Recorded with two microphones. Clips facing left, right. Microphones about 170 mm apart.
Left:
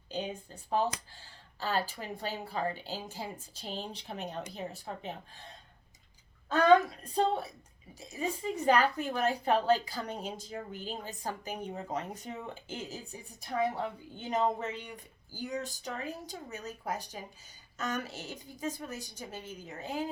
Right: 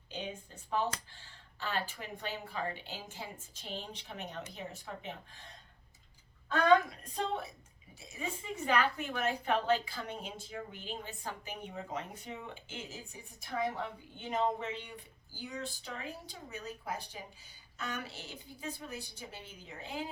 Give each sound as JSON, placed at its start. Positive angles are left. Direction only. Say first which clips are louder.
{"t": 0.1, "sound": "a woman's voice", "louder": "left 5 dB", "side_deg": 35}
{"t": 7.1, "sound": "a woman's voice", "louder": "left 7 dB", "side_deg": 35}